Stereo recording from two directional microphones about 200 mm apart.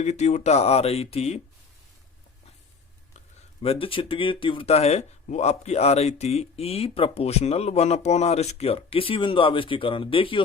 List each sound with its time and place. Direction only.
0.0 s speech: 35° left (ahead or behind)
3.6 s speech: 30° left (ahead or behind)